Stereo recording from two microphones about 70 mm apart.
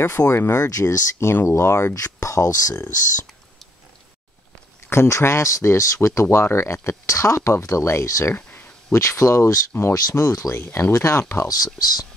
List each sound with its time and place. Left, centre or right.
0.0 s speech: left
0.7 s speech: left
4.8 s speech: left
8.4 s a sound: left
8.9 s speech: left
9.9 s speech: left
10.5 s speech: left
11.4 s speech: left